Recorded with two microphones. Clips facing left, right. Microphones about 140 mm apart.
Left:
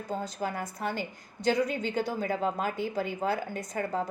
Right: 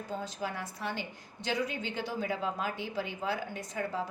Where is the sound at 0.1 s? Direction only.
45° left (ahead or behind).